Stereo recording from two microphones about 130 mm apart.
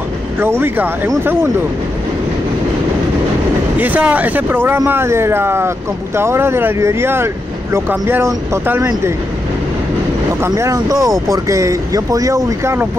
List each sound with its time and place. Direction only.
0.4 s speech: 15° right (ahead or behind)
3.7 s speech: 10° right (ahead or behind)
10.4 s speech: 25° right (ahead or behind)